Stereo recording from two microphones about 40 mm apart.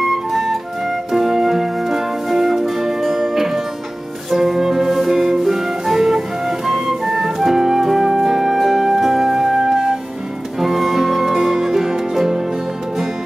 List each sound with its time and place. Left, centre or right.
0.0 s flute: centre
4.3 s music: centre
5.2 s flute: centre
10.6 s music: centre